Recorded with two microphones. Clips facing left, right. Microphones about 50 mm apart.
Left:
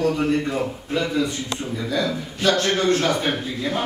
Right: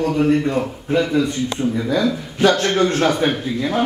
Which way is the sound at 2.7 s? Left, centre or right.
Right.